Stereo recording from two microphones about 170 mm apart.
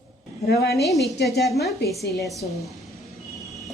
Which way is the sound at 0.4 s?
70° left (ahead or behind).